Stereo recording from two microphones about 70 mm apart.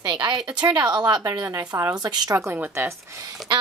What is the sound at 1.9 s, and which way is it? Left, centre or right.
Speech, right.